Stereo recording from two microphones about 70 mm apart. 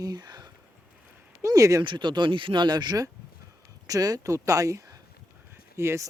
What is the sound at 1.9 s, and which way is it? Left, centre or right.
Speech, right.